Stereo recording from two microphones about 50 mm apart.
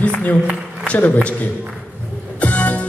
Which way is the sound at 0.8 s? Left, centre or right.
Left.